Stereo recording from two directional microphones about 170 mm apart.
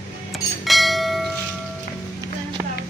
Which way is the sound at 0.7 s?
Centre (ahead or behind).